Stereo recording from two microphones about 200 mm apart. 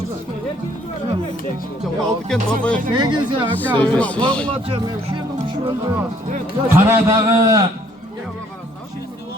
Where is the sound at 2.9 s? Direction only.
25° right (ahead or behind).